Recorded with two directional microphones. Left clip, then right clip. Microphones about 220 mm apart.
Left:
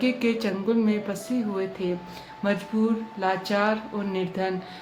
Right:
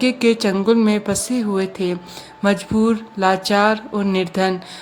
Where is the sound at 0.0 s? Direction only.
50° right (ahead or behind).